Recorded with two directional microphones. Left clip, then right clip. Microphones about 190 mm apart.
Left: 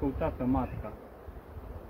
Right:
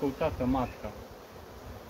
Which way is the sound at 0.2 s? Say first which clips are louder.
Right 2 dB; 15° right (ahead or behind).